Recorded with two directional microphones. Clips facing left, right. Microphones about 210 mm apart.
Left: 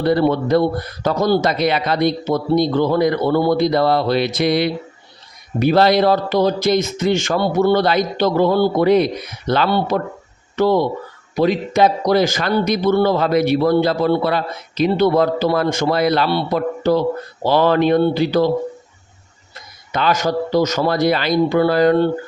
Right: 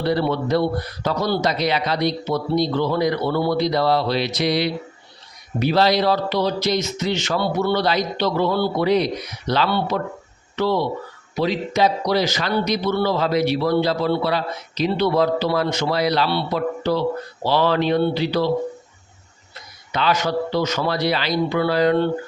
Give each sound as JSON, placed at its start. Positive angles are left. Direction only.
{"t": 0.0, "sound": "a man's voice", "side_deg": 50}
{"t": 19.9, "sound": "a man's voice", "side_deg": 45}